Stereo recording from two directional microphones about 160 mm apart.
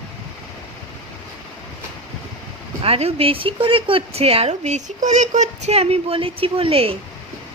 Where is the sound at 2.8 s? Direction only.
40° right (ahead or behind).